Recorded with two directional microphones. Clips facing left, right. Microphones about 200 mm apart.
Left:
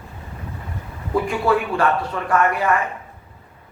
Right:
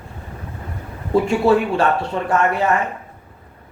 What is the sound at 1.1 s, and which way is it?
A man's voice, 25° right (ahead or behind).